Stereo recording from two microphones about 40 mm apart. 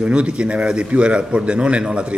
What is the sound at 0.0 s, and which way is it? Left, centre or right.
A man's voice, right.